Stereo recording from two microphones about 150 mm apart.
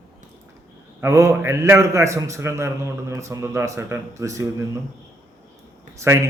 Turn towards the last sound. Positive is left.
turn(degrees=-20)  # may be behind; listen again after turning